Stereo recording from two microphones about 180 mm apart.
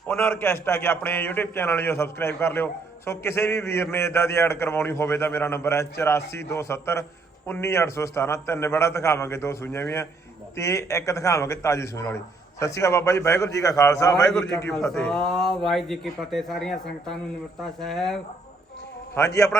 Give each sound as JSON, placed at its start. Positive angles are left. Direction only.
{"t": 0.1, "sound": "a man's voice", "side_deg": 10}
{"t": 14.7, "sound": "speech", "side_deg": 5}
{"t": 19.1, "sound": "a man's voice", "side_deg": 20}